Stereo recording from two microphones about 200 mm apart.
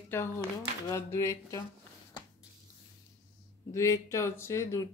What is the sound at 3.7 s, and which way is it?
Speech, 15° left (ahead or behind).